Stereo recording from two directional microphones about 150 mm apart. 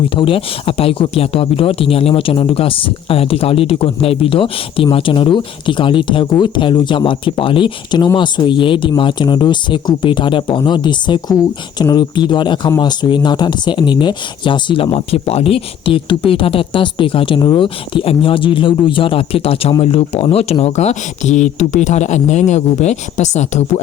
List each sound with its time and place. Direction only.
0.2 s speech: 35° left (ahead or behind)